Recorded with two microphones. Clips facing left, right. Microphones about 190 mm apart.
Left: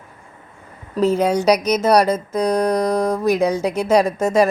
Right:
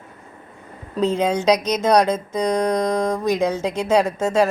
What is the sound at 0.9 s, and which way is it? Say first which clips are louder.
Speech: left 3 dB; 5° left (ahead or behind).